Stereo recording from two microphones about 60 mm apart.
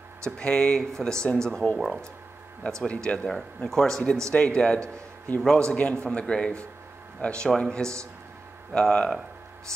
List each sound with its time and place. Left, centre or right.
0.4 s speech: centre
2.9 s speech: centre
3.3 s speech: centre